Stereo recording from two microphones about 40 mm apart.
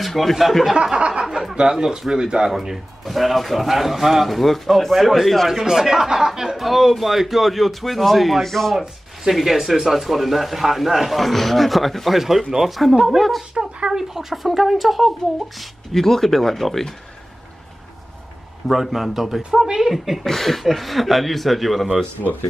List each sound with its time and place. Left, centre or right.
0.0 s speech: centre
0.9 s a sound: right
1.5 s speech: centre
5.5 s speech: centre
9.3 s speech: centre
12.2 s speech: centre
14.3 s speech: centre
15.9 s speech: centre
18.7 s speech: centre
20.2 s speech: centre